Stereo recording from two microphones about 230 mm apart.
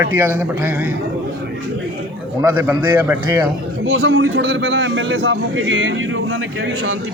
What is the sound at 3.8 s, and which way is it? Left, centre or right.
A man's voice, right.